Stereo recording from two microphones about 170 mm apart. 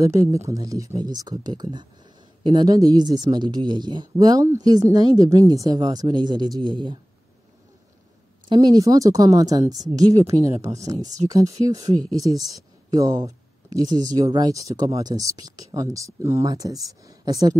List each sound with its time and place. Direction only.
0.0 s speech: 20° right (ahead or behind)
8.5 s speech: 20° right (ahead or behind)